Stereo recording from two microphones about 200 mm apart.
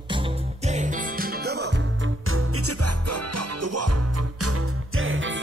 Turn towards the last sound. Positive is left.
turn(degrees=-70)  # may be behind; listen again after turning